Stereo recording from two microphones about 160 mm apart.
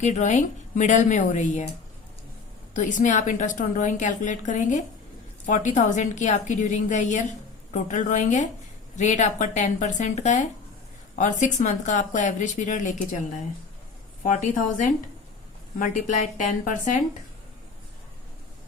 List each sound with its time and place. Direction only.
0.0 s a woman's voice: 50° left (ahead or behind)
2.7 s a woman's voice: 50° left (ahead or behind)
14.3 s a woman's voice: 55° left (ahead or behind)